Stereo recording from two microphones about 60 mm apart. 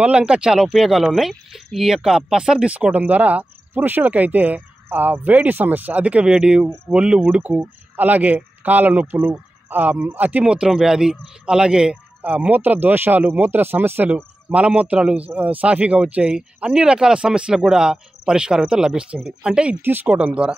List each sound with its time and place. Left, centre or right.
0.0 s speech: centre
2.7 s speech: right
7.3 s speech: right
10.4 s speech: centre
12.2 s speech: right
19.8 s speech: right
20.1 s speech: centre